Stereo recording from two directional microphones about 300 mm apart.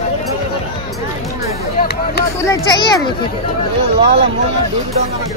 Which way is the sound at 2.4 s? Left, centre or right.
Centre.